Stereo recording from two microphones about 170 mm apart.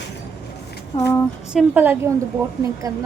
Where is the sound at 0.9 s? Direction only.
15° left (ahead or behind).